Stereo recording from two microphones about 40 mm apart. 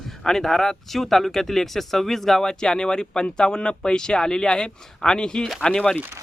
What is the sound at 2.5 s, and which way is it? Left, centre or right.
Speech, centre.